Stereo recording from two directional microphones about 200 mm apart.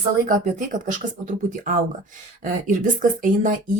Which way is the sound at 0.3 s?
40° right (ahead or behind).